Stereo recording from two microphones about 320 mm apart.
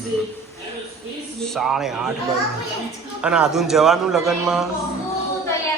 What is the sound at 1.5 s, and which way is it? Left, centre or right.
Speech, centre.